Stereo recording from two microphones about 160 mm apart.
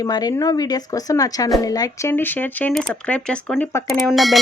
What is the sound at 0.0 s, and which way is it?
Speech, 25° left (ahead or behind).